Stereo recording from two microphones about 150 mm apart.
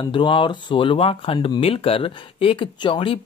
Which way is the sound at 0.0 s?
35° left (ahead or behind).